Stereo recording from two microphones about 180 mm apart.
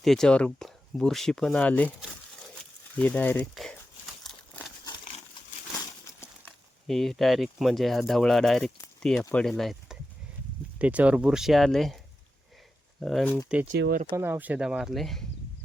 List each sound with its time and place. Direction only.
0.0 s speech: centre (ahead or behind)
3.0 s speech: 10° left (ahead or behind)
4.2 s crumpling: centre (ahead or behind)
6.8 s speech: centre (ahead or behind)
13.0 s speech: centre (ahead or behind)
13.7 s speech: 65° right (ahead or behind)
14.2 s speech: 10° right (ahead or behind)